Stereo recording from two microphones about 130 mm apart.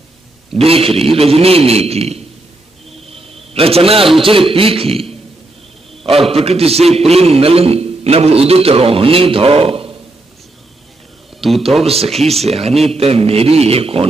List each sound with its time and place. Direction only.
0.7 s a man's voice: 50° right (ahead or behind)
3.2 s a sound: 50° right (ahead or behind)
4.2 s a man's voice: 45° right (ahead or behind)
6.3 s a man's voice: 50° right (ahead or behind)
11.8 s a man's voice: 50° right (ahead or behind)
12.1 s speech: centre (ahead or behind)
12.4 s a man's voice: 50° right (ahead or behind)